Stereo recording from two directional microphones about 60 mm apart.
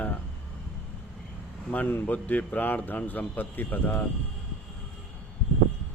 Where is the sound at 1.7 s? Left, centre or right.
Left.